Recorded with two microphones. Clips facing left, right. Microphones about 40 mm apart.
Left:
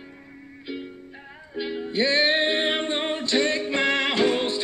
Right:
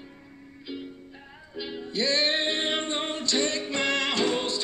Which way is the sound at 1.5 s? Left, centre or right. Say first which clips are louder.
Left 5 dB; left.